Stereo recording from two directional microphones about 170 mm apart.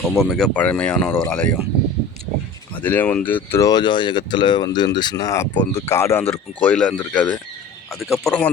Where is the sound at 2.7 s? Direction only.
10° left (ahead or behind).